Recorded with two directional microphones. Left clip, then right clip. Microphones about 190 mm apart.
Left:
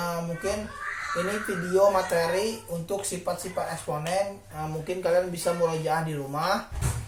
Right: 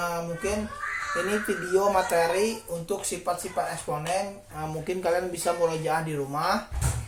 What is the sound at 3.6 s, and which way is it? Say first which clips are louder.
Speech: right 1 dB; 30° right (ahead or behind).